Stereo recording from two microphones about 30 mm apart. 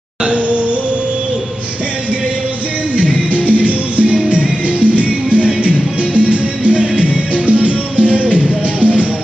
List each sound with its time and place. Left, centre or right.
0.2 s music: right
3.0 s music: right